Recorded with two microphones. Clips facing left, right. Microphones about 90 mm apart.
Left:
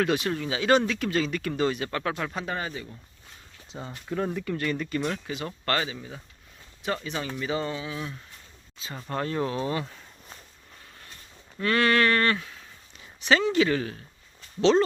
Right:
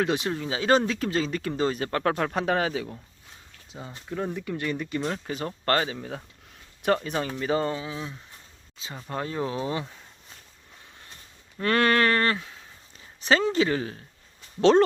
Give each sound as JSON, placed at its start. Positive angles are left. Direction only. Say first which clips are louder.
{"t": 0.0, "sound": "speech", "louder": "even", "side_deg": -25}
{"t": 2.3, "sound": "a man's voice", "louder": "right 7 dB", "side_deg": -70}
{"t": 3.7, "sound": "speech", "louder": "left 2 dB", "side_deg": -5}
{"t": 4.4, "sound": "speech", "louder": "left 1 dB", "side_deg": -10}
{"t": 5.1, "sound": "speech", "louder": "right 2 dB", "side_deg": -40}
{"t": 6.0, "sound": "speech", "louder": "right 5 dB", "side_deg": -60}
{"t": 9.0, "sound": "speech", "louder": "left 2 dB", "side_deg": -10}
{"t": 11.6, "sound": "speech", "louder": "right 1 dB", "side_deg": -40}
{"t": 14.6, "sound": "speech", "louder": "right 3 dB", "side_deg": -50}